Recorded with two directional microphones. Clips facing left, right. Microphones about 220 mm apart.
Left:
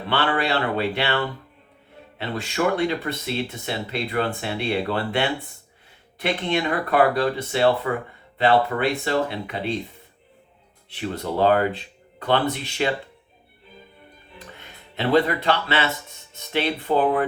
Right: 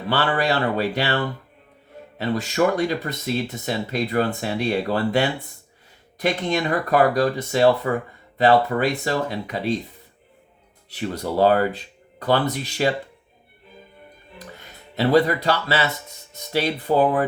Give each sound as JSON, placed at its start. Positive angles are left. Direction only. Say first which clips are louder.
{"t": 0.1, "sound": "speech", "louder": "right 1 dB", "side_deg": -40}
{"t": 10.8, "sound": "speech", "louder": "right 1 dB", "side_deg": -40}
{"t": 14.3, "sound": "speech", "louder": "right 2 dB", "side_deg": -40}